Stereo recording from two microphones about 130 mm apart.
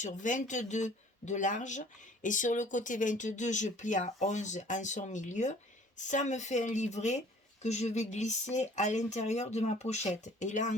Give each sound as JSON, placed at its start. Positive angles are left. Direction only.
{"t": 0.0, "sound": "speech", "side_deg": 75}